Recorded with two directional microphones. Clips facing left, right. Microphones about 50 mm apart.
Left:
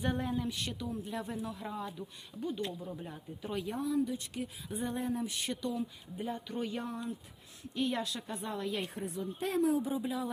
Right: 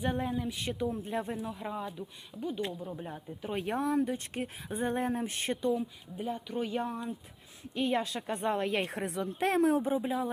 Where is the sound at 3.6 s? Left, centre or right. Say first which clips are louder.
Right 3 dB; right.